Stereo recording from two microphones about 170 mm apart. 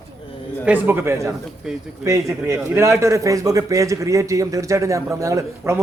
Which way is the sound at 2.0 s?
20° right (ahead or behind).